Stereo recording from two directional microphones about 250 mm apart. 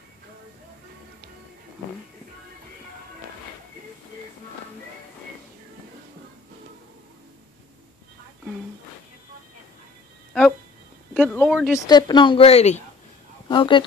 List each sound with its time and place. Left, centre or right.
11.1 s speech: centre
11.9 s speech: centre